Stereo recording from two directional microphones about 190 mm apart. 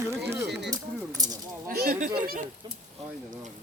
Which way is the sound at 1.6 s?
50° right (ahead or behind).